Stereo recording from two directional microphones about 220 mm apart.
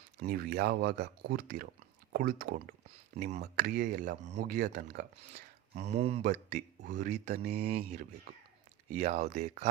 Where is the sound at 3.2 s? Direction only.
30° right (ahead or behind).